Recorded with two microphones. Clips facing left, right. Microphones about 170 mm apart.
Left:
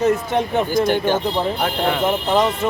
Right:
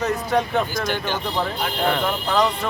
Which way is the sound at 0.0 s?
25° left (ahead or behind).